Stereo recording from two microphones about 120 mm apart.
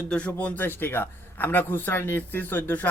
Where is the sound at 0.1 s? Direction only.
10° left (ahead or behind).